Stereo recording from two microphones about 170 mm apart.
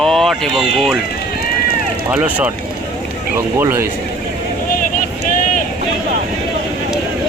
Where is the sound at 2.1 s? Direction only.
10° right (ahead or behind).